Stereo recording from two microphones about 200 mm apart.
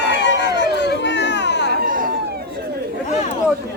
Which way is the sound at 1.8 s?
45° right (ahead or behind).